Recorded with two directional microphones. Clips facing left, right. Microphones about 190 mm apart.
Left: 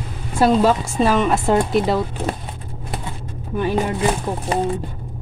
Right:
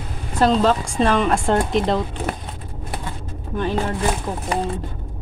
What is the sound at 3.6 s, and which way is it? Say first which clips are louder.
Speech: left 2 dB; 10° left (ahead or behind).